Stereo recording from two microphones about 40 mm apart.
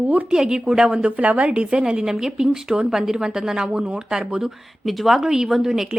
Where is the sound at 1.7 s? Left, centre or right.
Right.